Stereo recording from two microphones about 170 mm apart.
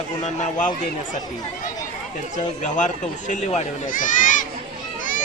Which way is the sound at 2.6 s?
45° left (ahead or behind).